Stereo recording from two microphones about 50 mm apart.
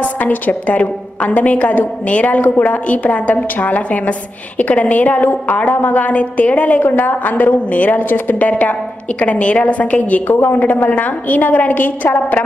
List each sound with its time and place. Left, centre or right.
0.2 s a woman's voice: left
8.0 s a woman's voice: left